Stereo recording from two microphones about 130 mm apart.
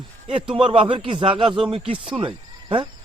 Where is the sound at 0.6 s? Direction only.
40° right (ahead or behind).